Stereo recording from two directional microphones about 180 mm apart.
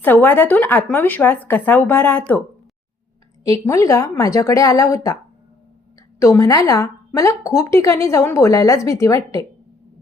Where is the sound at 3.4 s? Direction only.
20° left (ahead or behind).